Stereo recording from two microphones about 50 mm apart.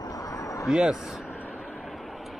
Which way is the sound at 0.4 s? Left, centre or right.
Left.